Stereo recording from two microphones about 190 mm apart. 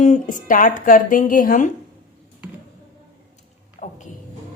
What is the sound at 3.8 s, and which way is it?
Music, 40° left (ahead or behind).